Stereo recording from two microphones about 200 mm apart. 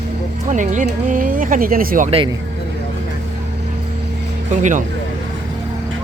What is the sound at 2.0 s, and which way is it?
Speech, 25° right (ahead or behind).